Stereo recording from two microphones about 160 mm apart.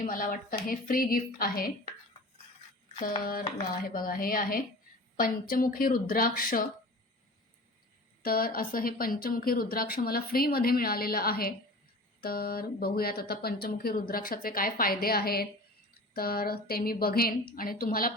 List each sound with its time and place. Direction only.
0.0 s a woman's voice: 60° left (ahead or behind)
3.8 s a woman's voice: 60° left (ahead or behind)
8.2 s speech: 65° left (ahead or behind)